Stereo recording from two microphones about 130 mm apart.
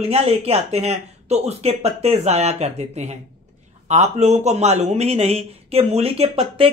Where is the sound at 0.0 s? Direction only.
50° right (ahead or behind).